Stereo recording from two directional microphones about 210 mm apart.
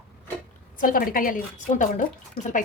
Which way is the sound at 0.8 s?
40° left (ahead or behind).